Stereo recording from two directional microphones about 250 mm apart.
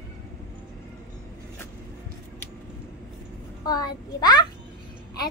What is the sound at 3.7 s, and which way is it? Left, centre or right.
Speech, centre.